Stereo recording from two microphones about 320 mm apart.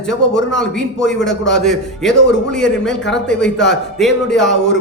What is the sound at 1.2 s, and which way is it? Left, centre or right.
Speech, centre.